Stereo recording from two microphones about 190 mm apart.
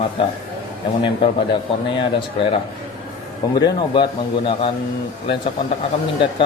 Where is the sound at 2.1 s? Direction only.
30° left (ahead or behind).